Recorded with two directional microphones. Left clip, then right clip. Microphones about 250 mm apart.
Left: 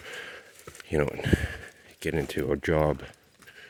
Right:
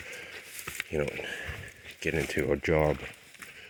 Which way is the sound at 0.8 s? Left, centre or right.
Left.